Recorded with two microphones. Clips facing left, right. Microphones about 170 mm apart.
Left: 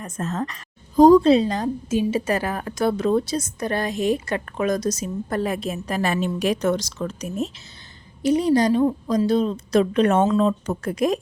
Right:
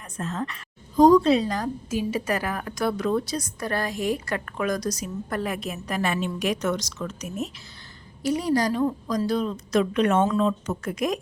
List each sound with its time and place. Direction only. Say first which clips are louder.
0.0 s a woman's voice: left 4 dB; 45° left (ahead or behind)